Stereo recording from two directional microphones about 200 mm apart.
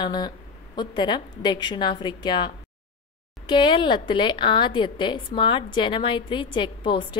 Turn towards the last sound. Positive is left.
turn(degrees=25)  # may be behind; listen again after turning